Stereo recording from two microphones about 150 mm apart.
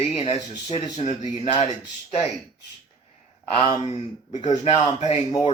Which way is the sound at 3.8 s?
45° left (ahead or behind).